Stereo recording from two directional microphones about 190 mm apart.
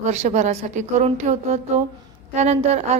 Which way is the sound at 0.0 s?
35° right (ahead or behind).